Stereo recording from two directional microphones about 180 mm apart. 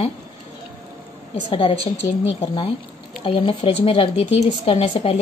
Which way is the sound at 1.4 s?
30° left (ahead or behind).